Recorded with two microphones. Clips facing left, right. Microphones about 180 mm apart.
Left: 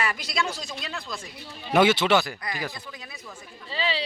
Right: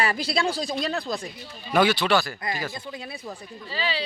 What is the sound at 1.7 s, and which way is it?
Speech, 20° left (ahead or behind).